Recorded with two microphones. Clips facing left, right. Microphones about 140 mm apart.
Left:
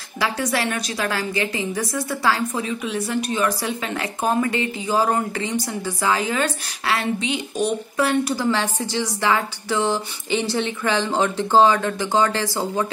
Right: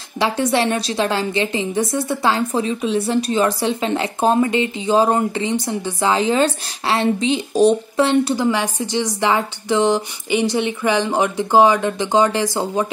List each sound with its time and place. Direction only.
0.2 s a woman's voice: 25° right (ahead or behind)
8.5 s speech: 15° right (ahead or behind)